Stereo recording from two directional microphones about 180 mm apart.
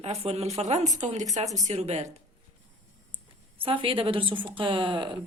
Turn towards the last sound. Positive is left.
turn(degrees=-25)  # may be behind; listen again after turning